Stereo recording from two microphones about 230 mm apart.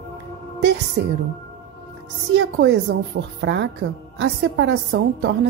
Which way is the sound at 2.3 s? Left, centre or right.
Right.